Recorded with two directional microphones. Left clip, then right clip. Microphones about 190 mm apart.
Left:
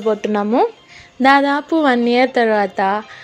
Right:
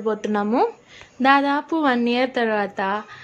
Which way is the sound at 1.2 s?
30° left (ahead or behind).